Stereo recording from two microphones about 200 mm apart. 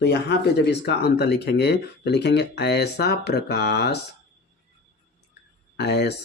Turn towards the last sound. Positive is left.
turn(degrees=55)  # may be behind; listen again after turning